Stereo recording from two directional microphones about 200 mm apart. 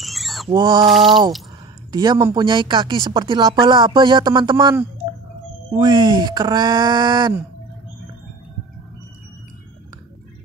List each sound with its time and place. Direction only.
0.0 s rodents: centre (ahead or behind)
0.5 s speech: 20° right (ahead or behind)
0.8 s speech: centre (ahead or behind)
1.9 s speech: 20° right (ahead or behind)